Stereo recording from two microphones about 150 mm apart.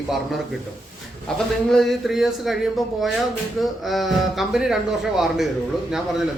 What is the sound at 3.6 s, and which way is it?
A man's voice, centre (ahead or behind).